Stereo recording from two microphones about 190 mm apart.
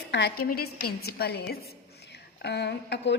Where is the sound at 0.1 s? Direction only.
65° left (ahead or behind).